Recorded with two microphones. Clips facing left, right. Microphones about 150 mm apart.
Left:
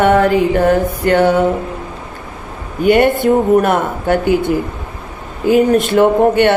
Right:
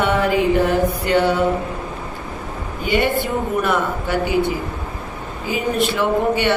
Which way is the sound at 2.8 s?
55° left (ahead or behind).